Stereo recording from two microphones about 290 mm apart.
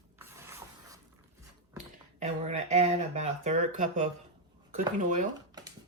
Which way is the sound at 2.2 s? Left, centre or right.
Right.